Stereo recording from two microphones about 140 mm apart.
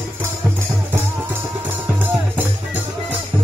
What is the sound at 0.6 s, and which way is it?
Music, 15° right (ahead or behind).